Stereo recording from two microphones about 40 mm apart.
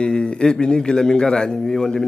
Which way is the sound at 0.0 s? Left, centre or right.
Left.